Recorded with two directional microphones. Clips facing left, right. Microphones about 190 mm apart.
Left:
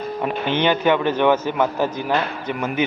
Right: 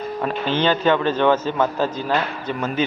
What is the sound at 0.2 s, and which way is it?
A man's voice, 15° left (ahead or behind).